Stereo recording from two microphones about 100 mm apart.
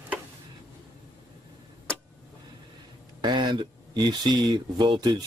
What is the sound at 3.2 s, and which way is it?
Speech, 50° right (ahead or behind).